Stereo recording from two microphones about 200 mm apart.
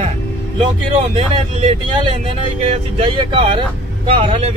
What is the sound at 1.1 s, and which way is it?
Speech, 30° right (ahead or behind).